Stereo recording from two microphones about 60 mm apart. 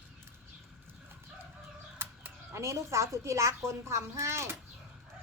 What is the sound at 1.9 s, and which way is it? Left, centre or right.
Chicken, right.